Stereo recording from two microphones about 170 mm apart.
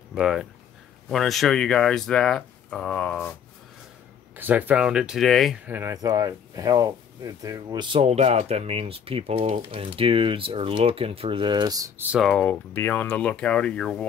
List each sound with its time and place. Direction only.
0.1 s speech: centre (ahead or behind)
4.4 s speech: 10° right (ahead or behind)
5.7 s speech: 15° right (ahead or behind)
12.1 s speech: centre (ahead or behind)